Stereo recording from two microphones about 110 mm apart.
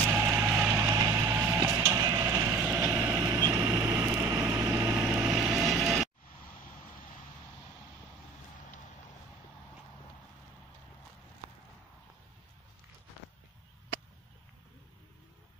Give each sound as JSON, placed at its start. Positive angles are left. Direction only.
{"t": 0.0, "sound": "vehicle", "side_deg": -20}
{"t": 1.5, "sound": "printer", "side_deg": -30}
{"t": 2.2, "sound": "vehicle", "side_deg": -20}